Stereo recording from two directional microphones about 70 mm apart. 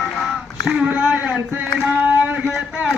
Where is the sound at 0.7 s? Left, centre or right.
Centre.